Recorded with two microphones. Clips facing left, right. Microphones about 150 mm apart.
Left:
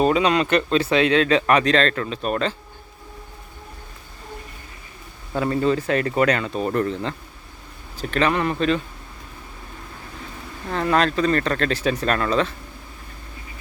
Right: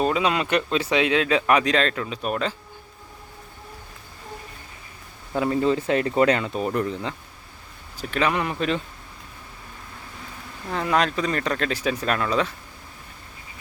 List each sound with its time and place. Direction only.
0.0 s speech: centre (ahead or behind)
5.3 s speech: 15° right (ahead or behind)
7.9 s speech: 10° right (ahead or behind)
10.7 s speech: 10° right (ahead or behind)